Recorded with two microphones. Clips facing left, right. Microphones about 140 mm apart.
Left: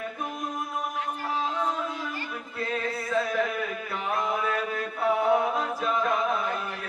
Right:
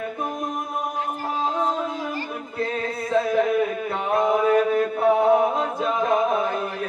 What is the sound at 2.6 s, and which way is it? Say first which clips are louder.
Music: right 4 dB; 30° right (ahead or behind).